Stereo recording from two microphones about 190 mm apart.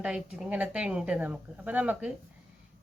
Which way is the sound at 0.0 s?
5° right (ahead or behind).